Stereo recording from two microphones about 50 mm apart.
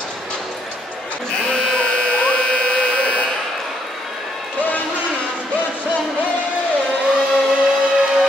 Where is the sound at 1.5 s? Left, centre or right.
Left.